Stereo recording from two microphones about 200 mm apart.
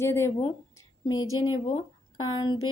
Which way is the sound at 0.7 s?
20° left (ahead or behind).